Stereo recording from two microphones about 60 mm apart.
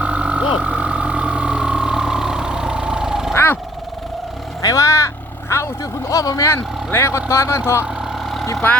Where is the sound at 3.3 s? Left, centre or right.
Left.